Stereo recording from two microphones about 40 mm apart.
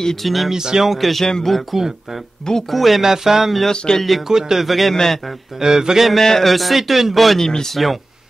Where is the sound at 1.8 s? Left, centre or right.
Centre.